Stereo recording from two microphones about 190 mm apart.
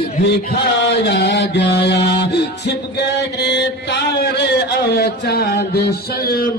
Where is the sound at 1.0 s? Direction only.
60° left (ahead or behind).